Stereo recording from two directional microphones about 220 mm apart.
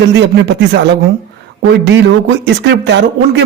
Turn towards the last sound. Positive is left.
turn(degrees=-55)  # may be behind; listen again after turning